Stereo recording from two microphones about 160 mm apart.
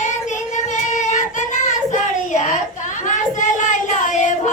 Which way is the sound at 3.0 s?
50° left (ahead or behind).